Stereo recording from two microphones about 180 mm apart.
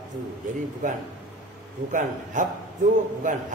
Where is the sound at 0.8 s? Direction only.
45° right (ahead or behind).